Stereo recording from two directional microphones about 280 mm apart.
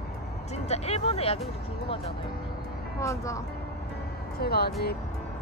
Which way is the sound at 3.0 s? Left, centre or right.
Centre.